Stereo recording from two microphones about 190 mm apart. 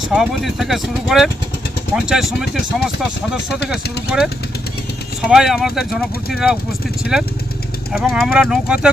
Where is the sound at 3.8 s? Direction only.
60° left (ahead or behind).